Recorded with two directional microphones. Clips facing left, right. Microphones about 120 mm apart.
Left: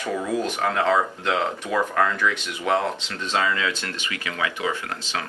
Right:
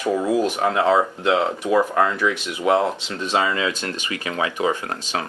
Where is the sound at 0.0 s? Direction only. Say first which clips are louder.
Right 5 dB; 15° right (ahead or behind).